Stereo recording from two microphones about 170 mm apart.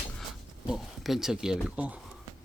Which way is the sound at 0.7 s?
Centre (ahead or behind).